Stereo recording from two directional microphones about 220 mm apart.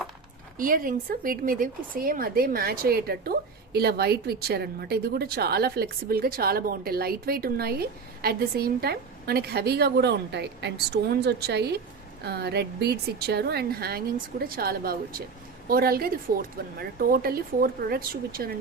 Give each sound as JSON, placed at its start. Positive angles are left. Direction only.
{"t": 0.5, "sound": "speech", "side_deg": -40}